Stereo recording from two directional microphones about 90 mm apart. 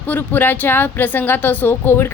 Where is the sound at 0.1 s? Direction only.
20° left (ahead or behind).